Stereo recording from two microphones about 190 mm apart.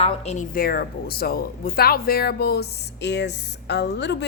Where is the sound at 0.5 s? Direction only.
50° left (ahead or behind).